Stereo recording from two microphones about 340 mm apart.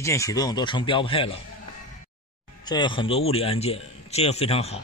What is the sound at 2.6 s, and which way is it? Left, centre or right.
A man's voice, centre.